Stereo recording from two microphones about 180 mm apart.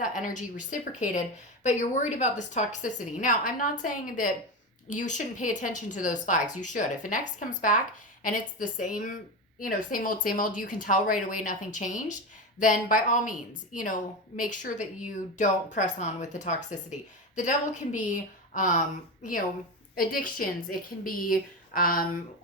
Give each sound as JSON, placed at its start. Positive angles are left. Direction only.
{"t": 0.0, "sound": "a woman's voice", "side_deg": 50}